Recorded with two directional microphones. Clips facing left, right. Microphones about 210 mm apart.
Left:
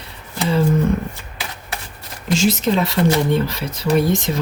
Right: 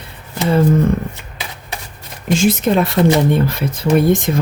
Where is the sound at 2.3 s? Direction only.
55° right (ahead or behind).